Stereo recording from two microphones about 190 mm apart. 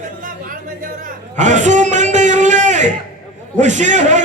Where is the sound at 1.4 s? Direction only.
40° right (ahead or behind).